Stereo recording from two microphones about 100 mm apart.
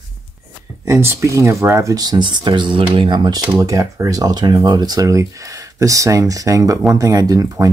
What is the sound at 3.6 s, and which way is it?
Speech, 30° right (ahead or behind).